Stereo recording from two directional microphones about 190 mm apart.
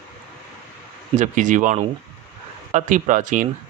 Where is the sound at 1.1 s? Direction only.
40° right (ahead or behind).